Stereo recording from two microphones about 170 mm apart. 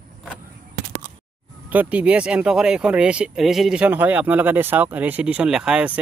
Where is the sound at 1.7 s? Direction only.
10° right (ahead or behind).